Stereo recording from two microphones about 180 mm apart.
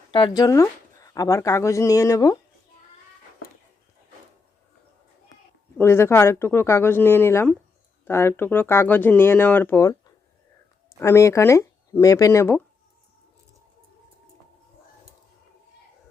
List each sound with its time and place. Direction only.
0.1 s speech: 30° left (ahead or behind)
5.7 s speech: 15° left (ahead or behind)
11.0 s speech: 15° left (ahead or behind)